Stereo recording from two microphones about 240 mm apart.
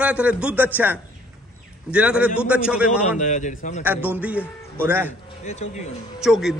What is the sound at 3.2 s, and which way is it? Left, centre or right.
Speech, left.